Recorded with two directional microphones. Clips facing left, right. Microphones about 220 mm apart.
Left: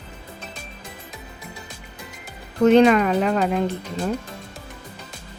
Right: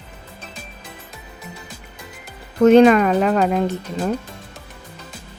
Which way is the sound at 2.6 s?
50° right (ahead or behind).